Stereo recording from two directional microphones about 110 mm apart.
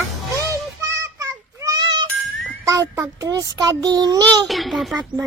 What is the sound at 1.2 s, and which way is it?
Child singing, 35° right (ahead or behind).